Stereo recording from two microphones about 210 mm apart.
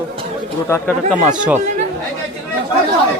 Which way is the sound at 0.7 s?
10° left (ahead or behind).